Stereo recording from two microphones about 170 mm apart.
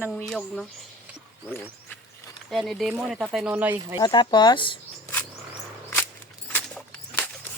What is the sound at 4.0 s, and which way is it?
Speech, 25° left (ahead or behind).